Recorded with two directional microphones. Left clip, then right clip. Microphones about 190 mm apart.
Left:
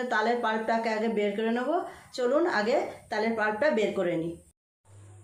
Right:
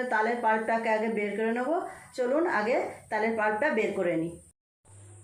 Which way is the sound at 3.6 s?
15° left (ahead or behind).